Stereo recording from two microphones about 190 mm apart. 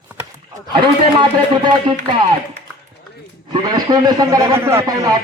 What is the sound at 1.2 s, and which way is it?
Speech, 25° right (ahead or behind).